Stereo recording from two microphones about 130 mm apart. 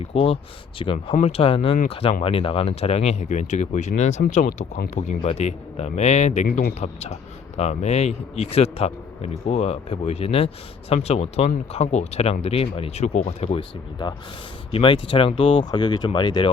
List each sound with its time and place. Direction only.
0.0 s speech: 50° left (ahead or behind)
14.7 s speech: 40° left (ahead or behind)